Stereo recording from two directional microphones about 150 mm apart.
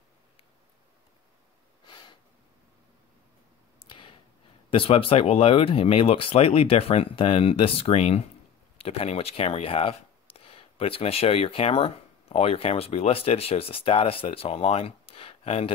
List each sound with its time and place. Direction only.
1.9 s snort: 30° left (ahead or behind)
3.8 s a sound: 35° left (ahead or behind)
4.6 s speech: 40° left (ahead or behind)